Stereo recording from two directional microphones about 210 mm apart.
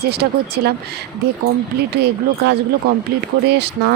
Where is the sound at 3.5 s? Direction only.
50° right (ahead or behind).